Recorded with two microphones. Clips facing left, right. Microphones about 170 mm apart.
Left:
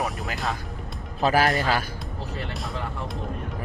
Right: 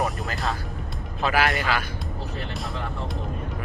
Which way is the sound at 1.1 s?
40° left (ahead or behind).